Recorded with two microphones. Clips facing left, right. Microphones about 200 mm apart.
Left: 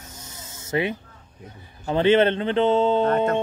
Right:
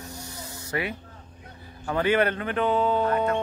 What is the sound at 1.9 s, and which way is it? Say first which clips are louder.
Speech: left 5 dB; 25° left (ahead or behind).